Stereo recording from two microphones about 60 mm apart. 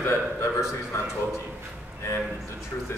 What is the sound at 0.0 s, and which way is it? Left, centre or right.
Speech, left.